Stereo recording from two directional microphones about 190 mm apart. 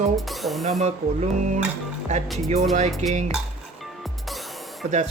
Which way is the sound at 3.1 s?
35° right (ahead or behind).